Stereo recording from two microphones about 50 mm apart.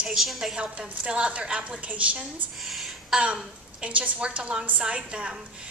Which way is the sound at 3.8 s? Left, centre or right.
Right.